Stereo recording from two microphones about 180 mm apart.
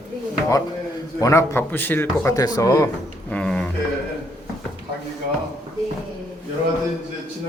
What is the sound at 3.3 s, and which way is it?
Speech, 5° left (ahead or behind).